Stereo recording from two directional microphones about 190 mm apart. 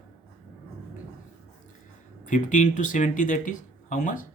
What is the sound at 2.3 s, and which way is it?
Speech, 40° left (ahead or behind).